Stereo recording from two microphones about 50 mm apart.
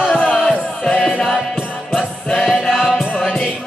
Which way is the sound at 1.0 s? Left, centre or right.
Centre.